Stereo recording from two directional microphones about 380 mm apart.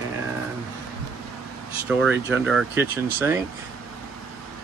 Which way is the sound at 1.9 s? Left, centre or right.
Centre.